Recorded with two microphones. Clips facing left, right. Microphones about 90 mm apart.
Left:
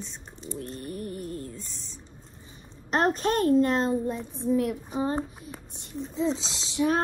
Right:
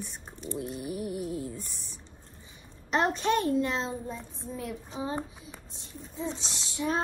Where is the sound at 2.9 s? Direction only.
45° left (ahead or behind); by 4.2 s 60° left (ahead or behind).